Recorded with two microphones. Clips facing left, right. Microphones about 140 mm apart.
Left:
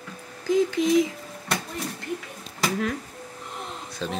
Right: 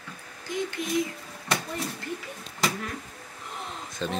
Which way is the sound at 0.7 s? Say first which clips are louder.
Left 8 dB; 90° left.